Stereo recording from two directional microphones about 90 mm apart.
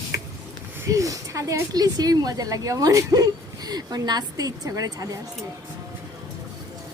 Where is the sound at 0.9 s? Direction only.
40° right (ahead or behind).